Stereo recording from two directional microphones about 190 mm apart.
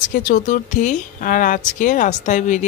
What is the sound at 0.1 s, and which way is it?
Speech, 40° left (ahead or behind).